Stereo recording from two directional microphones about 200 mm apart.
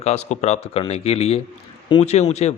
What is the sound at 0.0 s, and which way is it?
A man's voice, 35° left (ahead or behind).